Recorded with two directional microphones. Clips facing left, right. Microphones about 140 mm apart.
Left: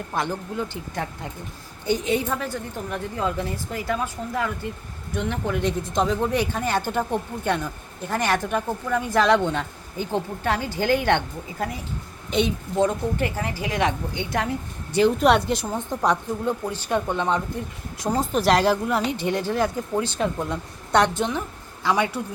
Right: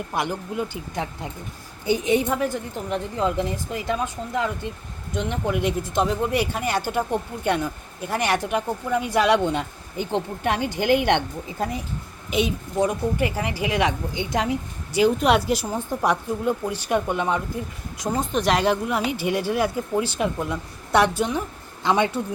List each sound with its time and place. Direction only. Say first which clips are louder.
0.1 s speech: left 1 dB; 15° right (ahead or behind)
12.3 s speech: left 1 dB; 5° right (ahead or behind)
18.0 s speech: left 1 dB; centre (ahead or behind)
21.8 s speech: right 2 dB; 25° right (ahead or behind)